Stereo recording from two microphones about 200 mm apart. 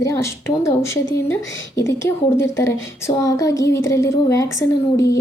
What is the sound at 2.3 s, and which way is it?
Speech, 15° left (ahead or behind).